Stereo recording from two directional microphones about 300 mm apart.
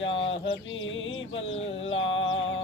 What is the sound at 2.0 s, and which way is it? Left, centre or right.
Music, left.